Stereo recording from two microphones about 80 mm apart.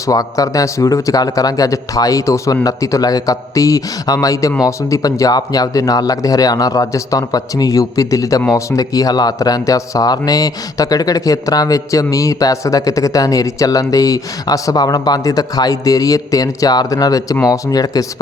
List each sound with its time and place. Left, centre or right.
0.1 s speech: left